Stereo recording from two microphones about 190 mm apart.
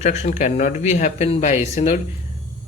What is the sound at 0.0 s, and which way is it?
Speech, 40° left (ahead or behind).